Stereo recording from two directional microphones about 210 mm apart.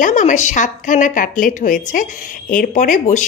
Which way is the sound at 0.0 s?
35° left (ahead or behind).